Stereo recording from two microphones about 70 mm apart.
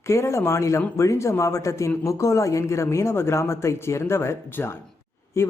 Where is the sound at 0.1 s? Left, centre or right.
Left.